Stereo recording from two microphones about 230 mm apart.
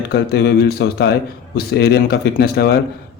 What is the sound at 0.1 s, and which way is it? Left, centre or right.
A man's voice, left.